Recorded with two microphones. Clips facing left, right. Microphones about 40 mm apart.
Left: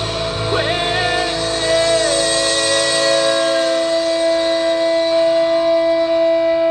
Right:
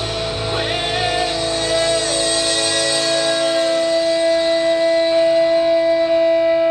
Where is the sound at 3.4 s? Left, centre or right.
Centre.